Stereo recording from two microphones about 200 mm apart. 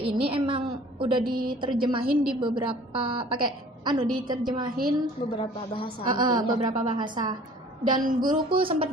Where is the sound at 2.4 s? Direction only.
25° right (ahead or behind).